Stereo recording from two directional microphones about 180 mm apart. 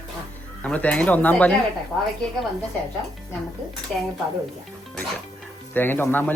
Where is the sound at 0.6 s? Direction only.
5° left (ahead or behind).